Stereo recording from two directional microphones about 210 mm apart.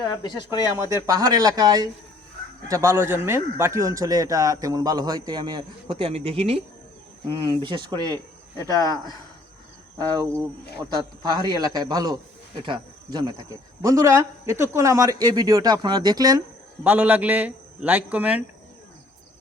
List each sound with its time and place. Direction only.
0.0 s speech: 20° left (ahead or behind)
1.0 s a man's voice: 15° right (ahead or behind)
10.0 s a man's voice: 15° right (ahead or behind)
16.8 s speech: 10° right (ahead or behind)